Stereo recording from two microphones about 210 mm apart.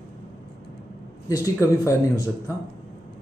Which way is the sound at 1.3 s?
15° left (ahead or behind).